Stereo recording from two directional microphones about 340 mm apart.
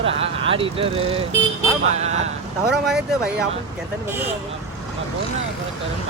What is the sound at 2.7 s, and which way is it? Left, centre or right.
Speech, centre.